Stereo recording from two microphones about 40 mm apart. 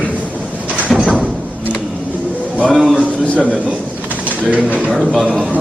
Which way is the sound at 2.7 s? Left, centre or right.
Centre.